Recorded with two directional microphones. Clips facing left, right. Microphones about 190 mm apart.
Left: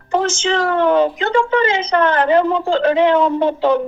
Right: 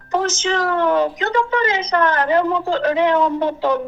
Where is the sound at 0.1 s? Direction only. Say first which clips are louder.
Left 2 dB; 30° left (ahead or behind).